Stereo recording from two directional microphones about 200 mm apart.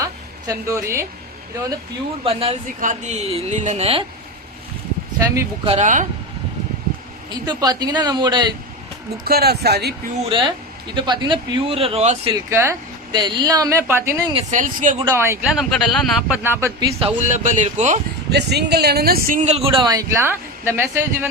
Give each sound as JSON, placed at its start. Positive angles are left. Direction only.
{"t": 0.0, "sound": "a sound", "side_deg": -15}
{"t": 2.2, "sound": "speech", "side_deg": -30}
{"t": 5.2, "sound": "a woman's voice", "side_deg": -15}
{"t": 5.6, "sound": "speech", "side_deg": -35}
{"t": 7.3, "sound": "speech", "side_deg": -20}
{"t": 9.2, "sound": "speech", "side_deg": -50}
{"t": 10.2, "sound": "speech", "side_deg": -25}
{"t": 12.3, "sound": "a woman's voice", "side_deg": -15}
{"t": 14.5, "sound": "speech", "side_deg": -40}
{"t": 15.0, "sound": "a woman's voice", "side_deg": -15}
{"t": 15.5, "sound": "speech", "side_deg": 0}
{"t": 16.4, "sound": "a woman's voice", "side_deg": -10}
{"t": 17.0, "sound": "speech", "side_deg": -35}
{"t": 18.3, "sound": "speech", "side_deg": -55}